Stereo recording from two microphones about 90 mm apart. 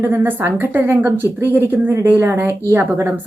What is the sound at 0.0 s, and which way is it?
Speech, 25° right (ahead or behind).